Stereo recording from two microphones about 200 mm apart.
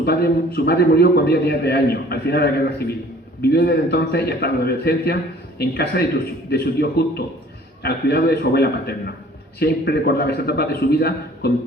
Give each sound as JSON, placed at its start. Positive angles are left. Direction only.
{"t": 0.0, "sound": "a man's voice", "side_deg": 55}